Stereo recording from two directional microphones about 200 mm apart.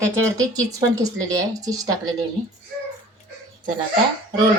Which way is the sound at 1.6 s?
20° right (ahead or behind).